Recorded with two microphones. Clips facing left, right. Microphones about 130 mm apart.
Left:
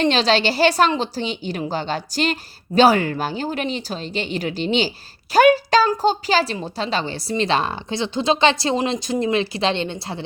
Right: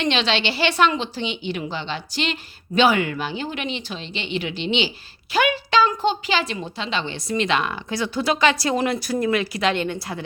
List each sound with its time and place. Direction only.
0.0 s a woman's voice: 40° left (ahead or behind)